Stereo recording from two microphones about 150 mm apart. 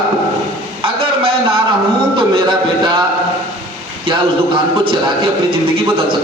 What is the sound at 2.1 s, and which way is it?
Speech, 35° right (ahead or behind).